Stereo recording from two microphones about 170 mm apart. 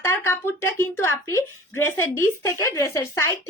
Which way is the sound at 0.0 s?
15° left (ahead or behind).